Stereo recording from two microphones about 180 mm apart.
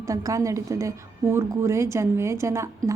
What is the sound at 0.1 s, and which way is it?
A woman's voice, 15° right (ahead or behind).